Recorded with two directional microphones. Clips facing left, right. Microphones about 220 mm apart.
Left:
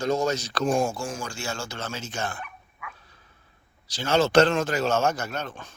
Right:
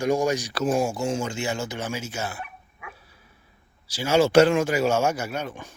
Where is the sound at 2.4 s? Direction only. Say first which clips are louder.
Right 2 dB; 25° right (ahead or behind).